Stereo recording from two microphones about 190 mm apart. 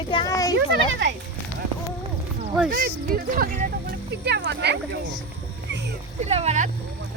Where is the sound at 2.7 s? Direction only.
50° right (ahead or behind).